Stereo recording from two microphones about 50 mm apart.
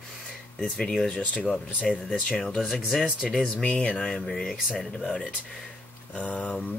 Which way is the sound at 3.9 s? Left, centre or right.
Centre.